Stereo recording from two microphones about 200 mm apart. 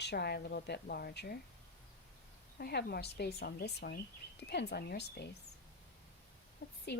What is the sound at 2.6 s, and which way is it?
A woman's voice, 50° left (ahead or behind).